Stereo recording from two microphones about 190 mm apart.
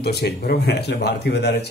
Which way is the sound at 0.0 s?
55° left (ahead or behind).